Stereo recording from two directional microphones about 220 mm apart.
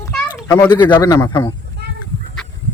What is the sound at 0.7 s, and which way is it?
Speech, 20° left (ahead or behind).